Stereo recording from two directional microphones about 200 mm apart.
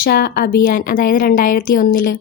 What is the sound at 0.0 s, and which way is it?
Speech, 50° left (ahead or behind).